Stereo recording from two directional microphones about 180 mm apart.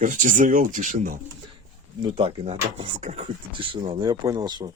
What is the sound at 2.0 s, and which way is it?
Speech, 30° right (ahead or behind).